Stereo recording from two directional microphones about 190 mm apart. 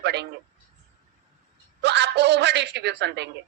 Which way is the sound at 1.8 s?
65° right (ahead or behind).